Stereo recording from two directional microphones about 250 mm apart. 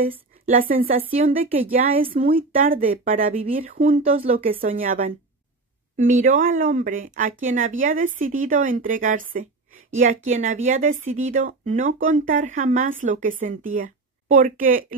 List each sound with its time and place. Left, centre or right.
0.6 s speech: right
1.1 s speech: right
1.6 s speech: right
2.0 s speech: right
2.5 s speech: right
4.5 s speech: right